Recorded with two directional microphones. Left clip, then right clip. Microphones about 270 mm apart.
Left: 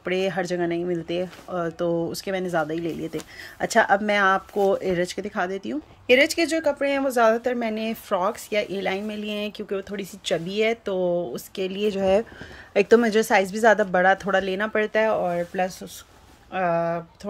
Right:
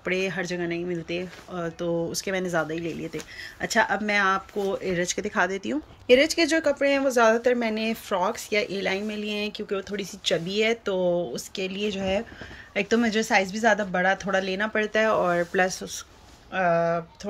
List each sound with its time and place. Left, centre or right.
0.0 s speech: centre